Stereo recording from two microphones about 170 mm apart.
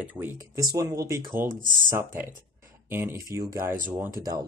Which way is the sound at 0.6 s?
20° right (ahead or behind).